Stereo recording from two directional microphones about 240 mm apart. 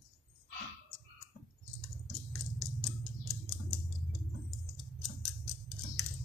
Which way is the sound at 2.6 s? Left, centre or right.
Centre.